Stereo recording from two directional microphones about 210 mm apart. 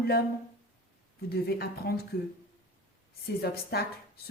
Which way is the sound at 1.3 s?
50° left (ahead or behind).